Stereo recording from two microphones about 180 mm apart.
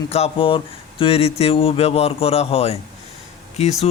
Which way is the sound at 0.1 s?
30° left (ahead or behind).